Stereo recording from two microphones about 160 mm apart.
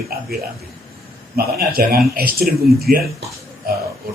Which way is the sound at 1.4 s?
70° right (ahead or behind).